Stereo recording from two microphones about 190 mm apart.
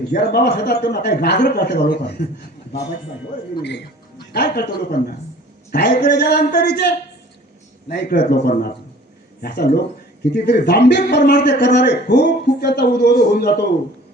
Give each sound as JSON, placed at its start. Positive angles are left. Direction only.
{"t": 0.1, "sound": "a man's voice", "side_deg": 55}
{"t": 3.6, "sound": "a man's voice", "side_deg": 65}